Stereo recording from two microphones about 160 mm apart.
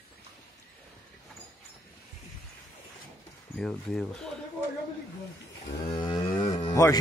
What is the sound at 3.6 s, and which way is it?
Speech, 5° left (ahead or behind).